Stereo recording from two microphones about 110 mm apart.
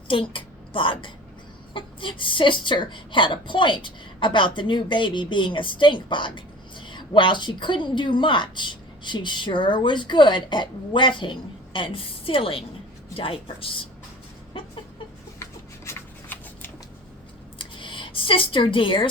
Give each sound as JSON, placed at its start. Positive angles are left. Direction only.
{"t": 0.1, "sound": "a woman's voice", "side_deg": 50}
{"t": 15.4, "sound": "shuffling cards", "side_deg": 25}
{"t": 17.6, "sound": "a sound", "side_deg": 50}